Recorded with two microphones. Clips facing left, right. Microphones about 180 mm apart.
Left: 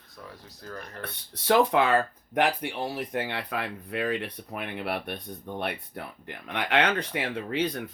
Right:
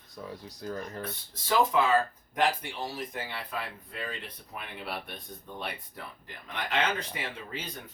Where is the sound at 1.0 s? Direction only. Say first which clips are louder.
Right 2 dB; 70° left (ahead or behind).